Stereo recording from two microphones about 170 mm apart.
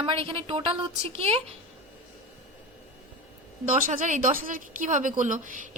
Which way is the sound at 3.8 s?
50° right (ahead or behind).